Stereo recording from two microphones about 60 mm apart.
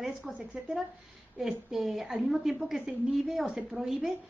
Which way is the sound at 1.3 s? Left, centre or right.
Centre.